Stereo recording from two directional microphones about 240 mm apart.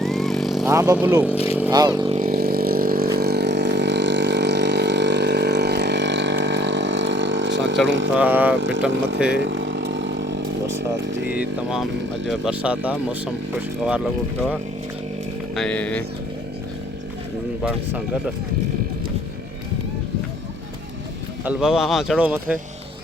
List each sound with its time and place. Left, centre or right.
0.0 s vehicle: centre
0.7 s speech: centre
1.5 s vehicle: centre
2.1 s vehicle: right
7.9 s speech: right
8.1 s speech: centre
8.5 s speech: right
9.4 s vehicle: right
11.3 s speech: centre
21.4 s speech: centre